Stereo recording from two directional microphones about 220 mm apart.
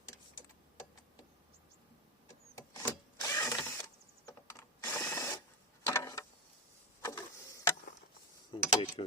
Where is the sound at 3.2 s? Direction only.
15° left (ahead or behind).